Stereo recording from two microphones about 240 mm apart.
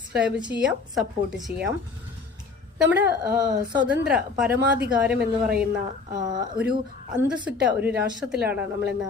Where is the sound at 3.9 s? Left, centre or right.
Centre.